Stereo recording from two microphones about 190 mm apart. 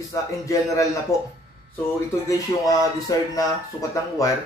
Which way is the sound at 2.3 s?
15° left (ahead or behind).